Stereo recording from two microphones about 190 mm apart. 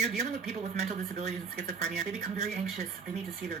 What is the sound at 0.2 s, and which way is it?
Speech, 35° right (ahead or behind).